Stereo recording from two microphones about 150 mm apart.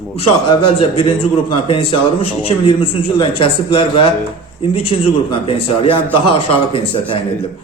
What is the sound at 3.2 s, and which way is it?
Speech, 35° left (ahead or behind).